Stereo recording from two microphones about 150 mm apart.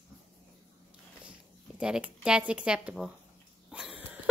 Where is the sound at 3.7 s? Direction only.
5° right (ahead or behind).